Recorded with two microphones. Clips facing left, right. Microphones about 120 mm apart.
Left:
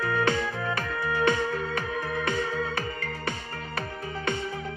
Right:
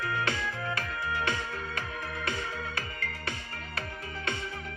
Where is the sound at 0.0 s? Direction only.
30° left (ahead or behind).